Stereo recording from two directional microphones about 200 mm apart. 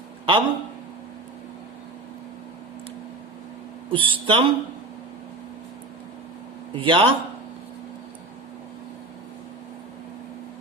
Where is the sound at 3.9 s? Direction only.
25° right (ahead or behind).